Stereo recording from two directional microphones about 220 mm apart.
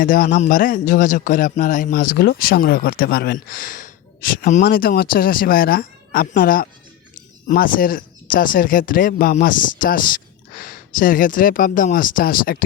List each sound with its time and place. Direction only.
0.0 s speech: 40° left (ahead or behind)